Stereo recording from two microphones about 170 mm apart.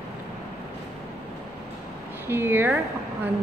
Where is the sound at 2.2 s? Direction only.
15° right (ahead or behind).